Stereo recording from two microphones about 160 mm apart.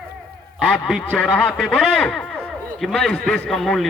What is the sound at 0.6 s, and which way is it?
A man's voice, 5° left (ahead or behind).